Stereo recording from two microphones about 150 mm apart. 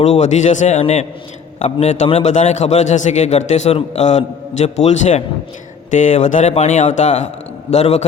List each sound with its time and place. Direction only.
0.0 s speech: 50° left (ahead or behind)